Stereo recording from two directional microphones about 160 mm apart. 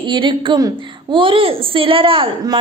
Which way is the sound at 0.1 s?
30° right (ahead or behind).